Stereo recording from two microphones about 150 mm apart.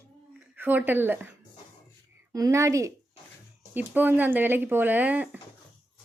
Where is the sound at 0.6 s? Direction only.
10° right (ahead or behind).